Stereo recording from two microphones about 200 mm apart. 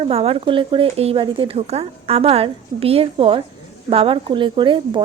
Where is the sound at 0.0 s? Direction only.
30° right (ahead or behind).